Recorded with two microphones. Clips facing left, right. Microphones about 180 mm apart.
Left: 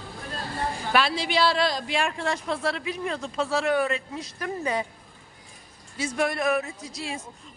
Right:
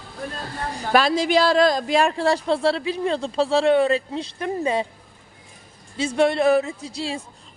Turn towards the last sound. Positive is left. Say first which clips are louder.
# right 6 dB
turn(degrees=-30)  # may be behind; listen again after turning